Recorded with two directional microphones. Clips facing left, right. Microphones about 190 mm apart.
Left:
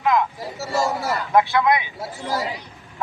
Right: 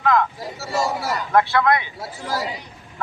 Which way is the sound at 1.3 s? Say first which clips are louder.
Even; 15° left (ahead or behind).